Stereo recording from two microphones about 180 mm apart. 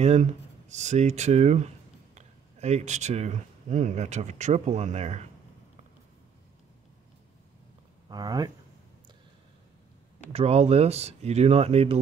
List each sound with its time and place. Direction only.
0.0 s speech: 35° right (ahead or behind)
8.1 s speech: 20° right (ahead or behind)
10.3 s speech: 35° right (ahead or behind)